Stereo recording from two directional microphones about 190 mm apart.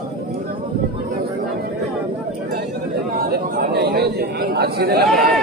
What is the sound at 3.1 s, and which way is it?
Chatter, 50° right (ahead or behind).